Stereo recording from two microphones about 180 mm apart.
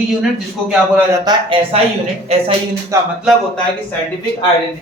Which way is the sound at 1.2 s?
25° right (ahead or behind).